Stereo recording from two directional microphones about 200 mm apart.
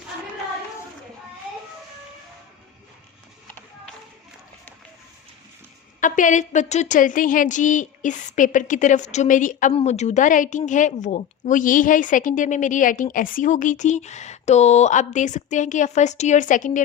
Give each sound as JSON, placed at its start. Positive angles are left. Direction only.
{"t": 6.0, "sound": "a woman's voice", "side_deg": 40}